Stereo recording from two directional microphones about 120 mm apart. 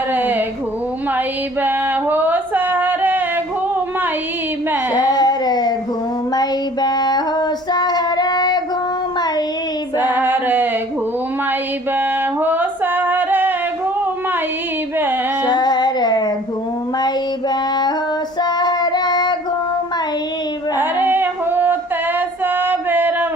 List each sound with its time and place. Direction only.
0.1 s a sound: 15° right (ahead or behind)
1.6 s music: 15° right (ahead or behind)
4.9 s a sound: 35° left (ahead or behind)
6.3 s female singing: 35° left (ahead or behind)
10.0 s female singing: 15° right (ahead or behind)
11.9 s music: 15° right (ahead or behind)
15.4 s music: 35° left (ahead or behind)
18.4 s child singing: 35° left (ahead or behind)
20.7 s singing: 15° right (ahead or behind)
22.4 s music: 15° right (ahead or behind)